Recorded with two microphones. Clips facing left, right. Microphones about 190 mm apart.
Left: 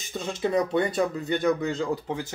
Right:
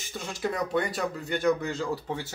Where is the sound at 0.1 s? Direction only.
20° left (ahead or behind).